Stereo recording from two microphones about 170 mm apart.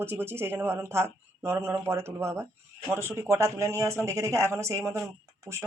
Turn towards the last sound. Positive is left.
turn(degrees=-20)  # may be behind; listen again after turning